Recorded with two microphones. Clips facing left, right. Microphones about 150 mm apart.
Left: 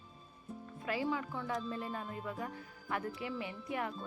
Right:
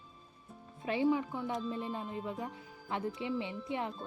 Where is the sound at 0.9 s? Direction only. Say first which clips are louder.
Right 6 dB; 20° right (ahead or behind).